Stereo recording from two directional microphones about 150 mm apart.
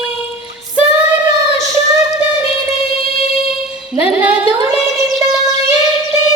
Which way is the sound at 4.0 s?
10° right (ahead or behind).